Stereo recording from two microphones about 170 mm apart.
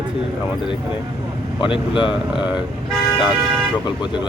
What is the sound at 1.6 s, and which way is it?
Speech, 30° left (ahead or behind).